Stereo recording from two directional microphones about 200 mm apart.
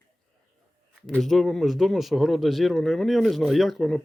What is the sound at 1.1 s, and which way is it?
Speech, centre (ahead or behind).